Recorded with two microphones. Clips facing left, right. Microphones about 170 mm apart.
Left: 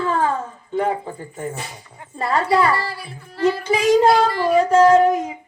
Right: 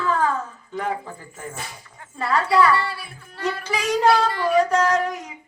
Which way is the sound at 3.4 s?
30° left (ahead or behind).